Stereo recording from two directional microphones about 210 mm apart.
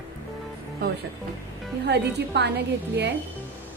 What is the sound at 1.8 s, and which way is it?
A woman's voice, 55° right (ahead or behind).